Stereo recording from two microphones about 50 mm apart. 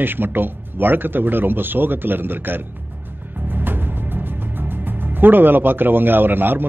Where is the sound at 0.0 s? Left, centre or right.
Right.